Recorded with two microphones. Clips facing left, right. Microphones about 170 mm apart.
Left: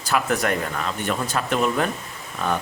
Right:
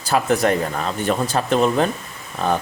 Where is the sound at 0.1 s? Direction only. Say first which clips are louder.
Right 4 dB; 30° right (ahead or behind).